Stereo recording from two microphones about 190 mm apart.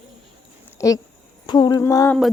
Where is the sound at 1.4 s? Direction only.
20° left (ahead or behind).